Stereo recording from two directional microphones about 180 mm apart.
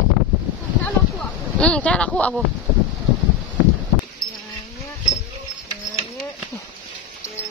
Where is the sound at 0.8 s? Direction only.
5° left (ahead or behind).